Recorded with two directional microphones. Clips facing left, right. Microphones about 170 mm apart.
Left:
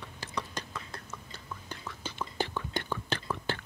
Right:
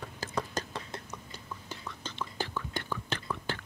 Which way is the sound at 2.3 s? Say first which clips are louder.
Left 3 dB; 20° left (ahead or behind).